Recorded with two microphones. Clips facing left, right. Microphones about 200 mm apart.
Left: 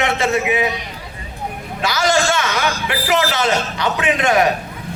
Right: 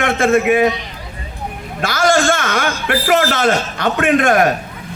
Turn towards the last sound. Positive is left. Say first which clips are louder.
# right 3 dB
turn(degrees=-50)  # may be behind; listen again after turning